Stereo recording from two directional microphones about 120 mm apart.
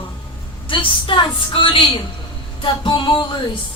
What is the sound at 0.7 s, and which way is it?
A woman's voice, 45° left (ahead or behind).